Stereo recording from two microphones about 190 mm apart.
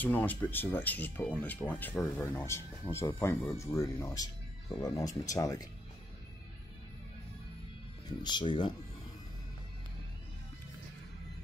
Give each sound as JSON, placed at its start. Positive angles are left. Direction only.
{"t": 0.0, "sound": "speech", "side_deg": 10}
{"t": 8.2, "sound": "speech", "side_deg": 25}